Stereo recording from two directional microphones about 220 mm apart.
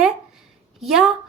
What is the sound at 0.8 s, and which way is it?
Speech, centre (ahead or behind).